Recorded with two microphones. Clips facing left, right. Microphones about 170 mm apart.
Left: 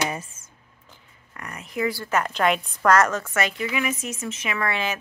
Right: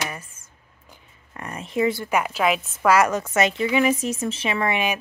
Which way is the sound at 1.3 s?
25° right (ahead or behind).